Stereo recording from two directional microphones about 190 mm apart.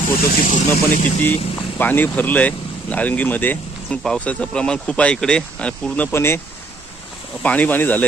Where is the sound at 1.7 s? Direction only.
10° left (ahead or behind).